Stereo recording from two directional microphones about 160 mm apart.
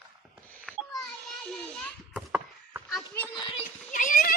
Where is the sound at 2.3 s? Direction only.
10° right (ahead or behind).